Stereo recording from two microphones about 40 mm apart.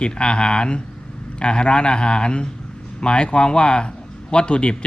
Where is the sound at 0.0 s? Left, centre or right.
Left.